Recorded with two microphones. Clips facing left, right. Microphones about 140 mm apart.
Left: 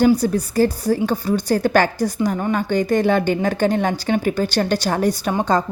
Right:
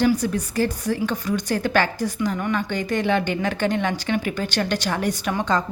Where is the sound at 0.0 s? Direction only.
35° left (ahead or behind).